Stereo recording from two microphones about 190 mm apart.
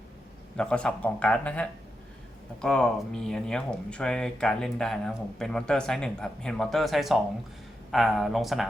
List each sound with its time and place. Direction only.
0.5 s speech: 5° left (ahead or behind)